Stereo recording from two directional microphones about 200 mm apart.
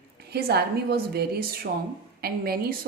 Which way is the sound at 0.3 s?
50° right (ahead or behind).